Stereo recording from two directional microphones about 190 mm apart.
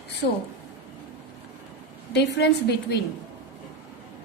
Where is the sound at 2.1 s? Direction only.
65° left (ahead or behind).